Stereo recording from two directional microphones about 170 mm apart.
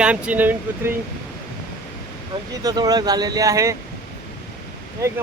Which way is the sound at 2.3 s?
20° right (ahead or behind).